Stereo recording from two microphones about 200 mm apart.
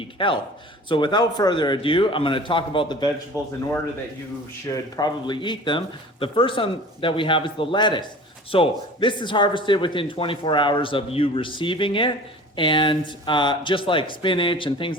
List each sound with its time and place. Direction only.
0.0 s a man's voice: 25° left (ahead or behind)
4.7 s a man's voice: 20° left (ahead or behind)